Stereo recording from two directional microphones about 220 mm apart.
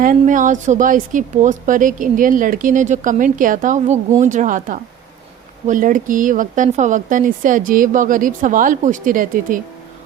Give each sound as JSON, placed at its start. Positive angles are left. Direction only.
{"t": 0.0, "sound": "a woman's voice", "side_deg": -35}